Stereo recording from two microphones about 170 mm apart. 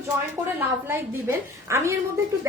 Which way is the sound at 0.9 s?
15° right (ahead or behind).